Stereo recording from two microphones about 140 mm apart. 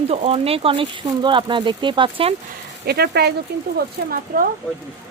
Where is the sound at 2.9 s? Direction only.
90° right.